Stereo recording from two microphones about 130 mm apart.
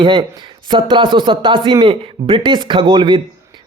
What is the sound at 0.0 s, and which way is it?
Speech, 40° right (ahead or behind).